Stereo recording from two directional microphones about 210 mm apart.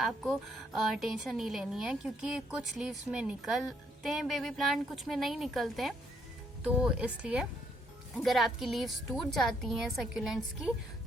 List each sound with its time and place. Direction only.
0.0 s a woman's voice: centre (ahead or behind)